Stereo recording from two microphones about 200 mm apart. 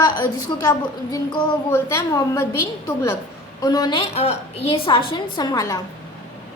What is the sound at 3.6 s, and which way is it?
A woman's voice, 20° left (ahead or behind).